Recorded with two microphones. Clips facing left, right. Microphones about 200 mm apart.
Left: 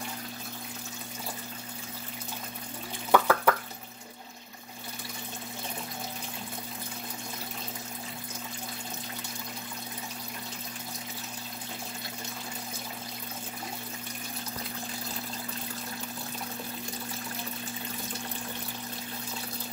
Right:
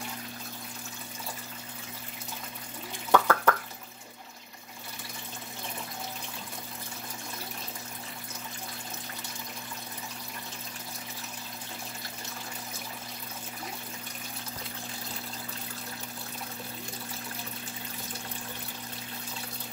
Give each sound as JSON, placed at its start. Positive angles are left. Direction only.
{"t": 3.1, "sound": "drip", "side_deg": 10}